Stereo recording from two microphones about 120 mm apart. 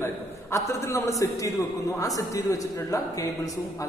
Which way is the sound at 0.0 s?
25° left (ahead or behind).